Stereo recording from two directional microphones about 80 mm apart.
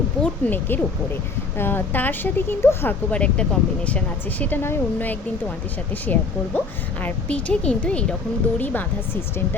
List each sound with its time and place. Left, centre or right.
0.2 s a woman's voice: left
3.1 s a woman's voice: centre